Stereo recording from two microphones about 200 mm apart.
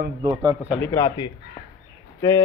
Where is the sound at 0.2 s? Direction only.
20° right (ahead or behind).